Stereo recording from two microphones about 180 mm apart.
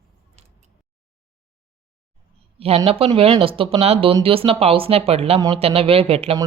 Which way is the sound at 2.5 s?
30° right (ahead or behind).